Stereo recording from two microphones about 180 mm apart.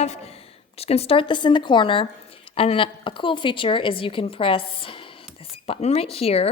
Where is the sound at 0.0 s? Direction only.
35° left (ahead or behind).